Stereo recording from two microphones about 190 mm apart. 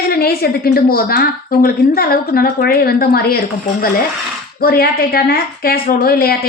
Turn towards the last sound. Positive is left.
turn(degrees=50)  # may be behind; listen again after turning